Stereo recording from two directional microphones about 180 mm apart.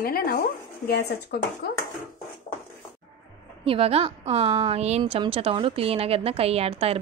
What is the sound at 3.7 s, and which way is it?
A woman's voice, 30° right (ahead or behind).